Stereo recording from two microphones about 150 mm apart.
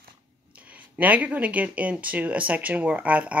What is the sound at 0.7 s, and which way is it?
Speech, 10° right (ahead or behind).